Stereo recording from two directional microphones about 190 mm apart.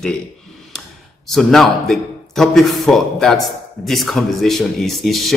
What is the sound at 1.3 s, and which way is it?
A man's voice, centre (ahead or behind).